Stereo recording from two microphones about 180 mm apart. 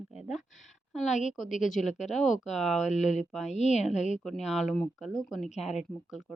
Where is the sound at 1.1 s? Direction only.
40° left (ahead or behind).